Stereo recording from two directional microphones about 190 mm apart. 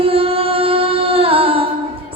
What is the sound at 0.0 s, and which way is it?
Music, 30° right (ahead or behind).